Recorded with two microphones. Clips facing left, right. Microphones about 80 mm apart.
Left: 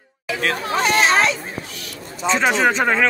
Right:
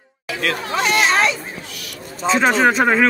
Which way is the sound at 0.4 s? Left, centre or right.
Left.